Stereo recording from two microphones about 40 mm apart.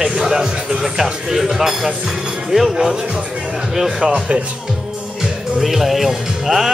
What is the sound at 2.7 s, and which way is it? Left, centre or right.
Music, centre.